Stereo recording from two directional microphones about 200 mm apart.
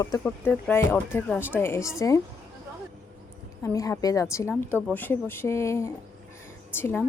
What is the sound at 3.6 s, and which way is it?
Speech, 15° left (ahead or behind).